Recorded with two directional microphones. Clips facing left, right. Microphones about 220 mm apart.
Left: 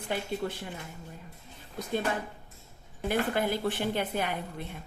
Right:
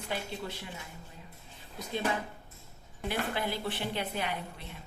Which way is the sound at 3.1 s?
50° left (ahead or behind).